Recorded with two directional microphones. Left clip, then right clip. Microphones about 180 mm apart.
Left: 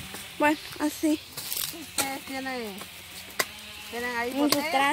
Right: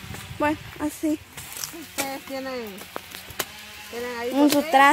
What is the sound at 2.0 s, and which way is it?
Speech, 20° left (ahead or behind).